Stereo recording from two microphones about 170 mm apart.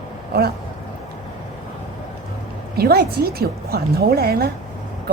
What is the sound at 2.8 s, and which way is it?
A woman's voice, 65° right (ahead or behind).